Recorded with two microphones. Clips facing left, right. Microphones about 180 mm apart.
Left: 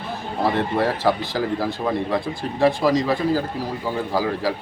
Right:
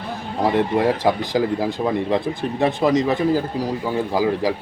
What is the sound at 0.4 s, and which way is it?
A man's voice, 15° right (ahead or behind).